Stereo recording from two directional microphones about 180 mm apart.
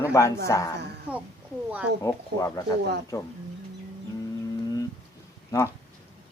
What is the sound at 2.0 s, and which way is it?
Speech, 15° left (ahead or behind).